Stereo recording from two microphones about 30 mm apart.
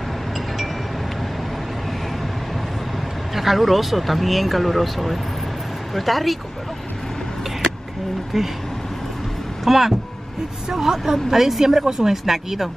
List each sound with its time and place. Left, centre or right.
3.3 s speech: centre
8.3 s speech: centre
9.7 s speech: centre